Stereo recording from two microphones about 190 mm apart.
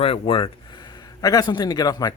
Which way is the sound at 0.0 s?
30° left (ahead or behind).